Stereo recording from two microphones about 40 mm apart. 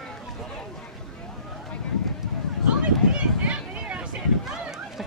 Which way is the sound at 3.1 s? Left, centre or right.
Right.